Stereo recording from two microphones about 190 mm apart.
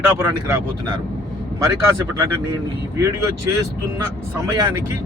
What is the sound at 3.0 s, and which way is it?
Speech, 15° right (ahead or behind).